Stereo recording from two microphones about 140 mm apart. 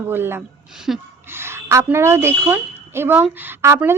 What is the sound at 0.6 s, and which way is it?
Speech, 5° right (ahead or behind).